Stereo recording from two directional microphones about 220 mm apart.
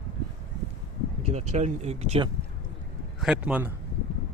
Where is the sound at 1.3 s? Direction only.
30° right (ahead or behind).